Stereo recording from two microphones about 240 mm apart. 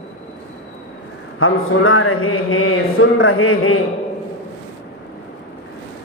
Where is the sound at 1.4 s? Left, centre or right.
Left.